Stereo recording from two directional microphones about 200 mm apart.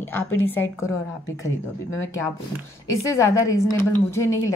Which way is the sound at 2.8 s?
15° left (ahead or behind).